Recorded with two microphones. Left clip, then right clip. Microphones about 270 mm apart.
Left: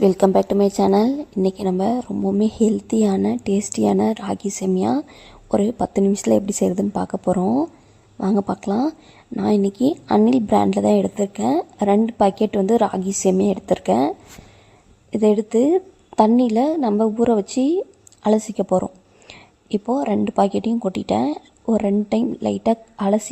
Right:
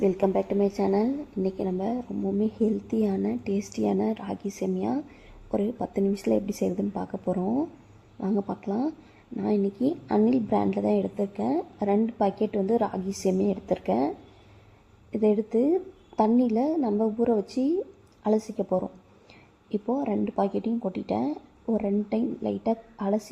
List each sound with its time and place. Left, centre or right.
0.0 s a woman's voice: left
0.9 s a woman's voice: left
1.5 s a woman's voice: left
15.1 s a woman's voice: left
17.4 s a woman's voice: left